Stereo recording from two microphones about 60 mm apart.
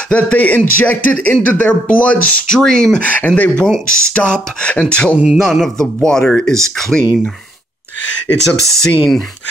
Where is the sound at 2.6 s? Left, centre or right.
Centre.